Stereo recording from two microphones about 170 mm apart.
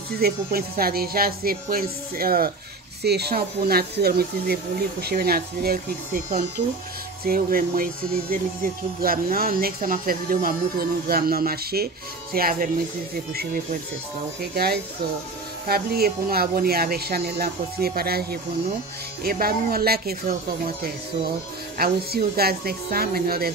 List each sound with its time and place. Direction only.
0.2 s speech: 65° right (ahead or behind)
3.0 s speech: 75° right (ahead or behind)